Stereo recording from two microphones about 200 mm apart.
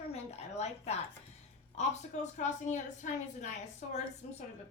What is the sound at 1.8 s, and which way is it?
A woman's voice, 35° left (ahead or behind).